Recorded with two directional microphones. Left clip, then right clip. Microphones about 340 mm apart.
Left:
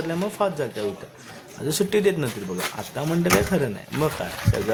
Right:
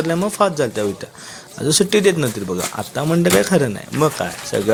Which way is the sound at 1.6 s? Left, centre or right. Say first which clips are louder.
Right 6 dB; left.